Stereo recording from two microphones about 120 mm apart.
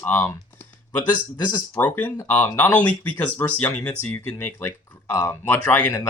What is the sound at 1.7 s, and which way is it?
Speech, 15° left (ahead or behind).